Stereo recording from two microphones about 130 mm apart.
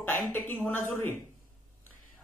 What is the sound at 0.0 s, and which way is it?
A woman's voice, 20° left (ahead or behind).